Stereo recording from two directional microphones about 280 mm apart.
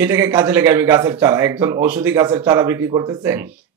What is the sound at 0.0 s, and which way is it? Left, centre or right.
Speech, centre.